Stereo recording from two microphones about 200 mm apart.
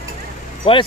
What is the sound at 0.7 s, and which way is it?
Speech, 30° left (ahead or behind).